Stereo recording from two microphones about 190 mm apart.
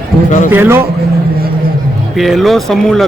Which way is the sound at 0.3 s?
40° left (ahead or behind).